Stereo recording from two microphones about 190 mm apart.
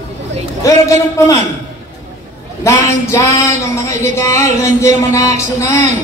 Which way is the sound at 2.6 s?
15° left (ahead or behind).